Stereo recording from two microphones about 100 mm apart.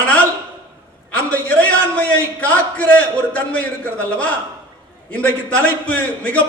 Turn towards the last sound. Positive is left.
turn(degrees=15)  # may be behind; listen again after turning